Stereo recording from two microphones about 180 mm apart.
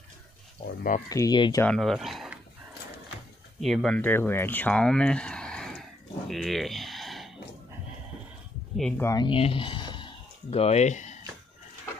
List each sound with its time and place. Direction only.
1.0 s speech: 20° left (ahead or behind)
1.6 s speech: 5° left (ahead or behind)
3.6 s speech: centre (ahead or behind)
8.7 s speech: 5° left (ahead or behind)
9.0 s speech: 25° left (ahead or behind); by 11.1 s 40° left (ahead or behind)